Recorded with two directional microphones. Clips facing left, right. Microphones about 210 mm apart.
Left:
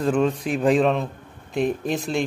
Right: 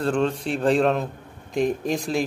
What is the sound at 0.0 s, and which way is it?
Speech, 10° left (ahead or behind).